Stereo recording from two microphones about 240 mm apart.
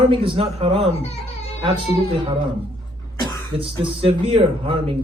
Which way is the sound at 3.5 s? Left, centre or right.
Right.